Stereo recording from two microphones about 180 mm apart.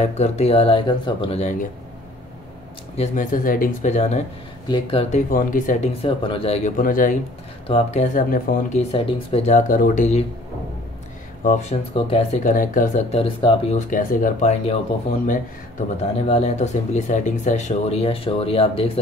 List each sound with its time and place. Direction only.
0.0 s speech: 40° left (ahead or behind)
3.0 s speech: 45° left (ahead or behind)
4.6 s speech: 30° left (ahead or behind)
5.3 s speech: 50° left (ahead or behind)
6.0 s speech: 30° left (ahead or behind)
6.8 s speech: 50° left (ahead or behind)
7.6 s speech: 35° left (ahead or behind); by 8.5 s 50° left (ahead or behind)
8.7 s speech: 35° left (ahead or behind)
11.4 s speech: 40° left (ahead or behind)
13.1 s speech: 30° left (ahead or behind)
13.7 s speech: 45° left (ahead or behind)
16.0 s speech: 35° left (ahead or behind)